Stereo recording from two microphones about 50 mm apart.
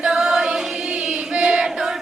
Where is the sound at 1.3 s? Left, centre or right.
Right.